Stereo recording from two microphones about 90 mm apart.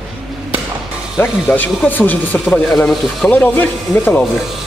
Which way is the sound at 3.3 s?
20° left (ahead or behind).